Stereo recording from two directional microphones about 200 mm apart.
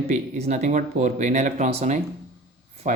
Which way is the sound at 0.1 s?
35° right (ahead or behind).